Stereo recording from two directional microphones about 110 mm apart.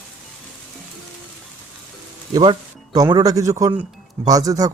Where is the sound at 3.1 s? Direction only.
35° right (ahead or behind).